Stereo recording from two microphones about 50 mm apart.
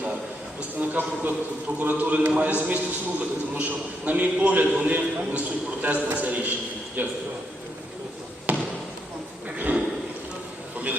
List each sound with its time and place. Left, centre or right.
0.8 s a man's voice: right
4.9 s a man's voice: right
8.5 s basketball bounce: right
9.7 s a sound: right